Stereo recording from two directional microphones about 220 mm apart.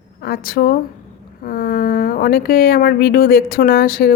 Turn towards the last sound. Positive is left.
turn(degrees=45)  # may be behind; listen again after turning